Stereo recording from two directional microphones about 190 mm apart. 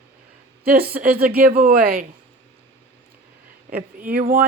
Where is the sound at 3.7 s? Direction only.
50° right (ahead or behind).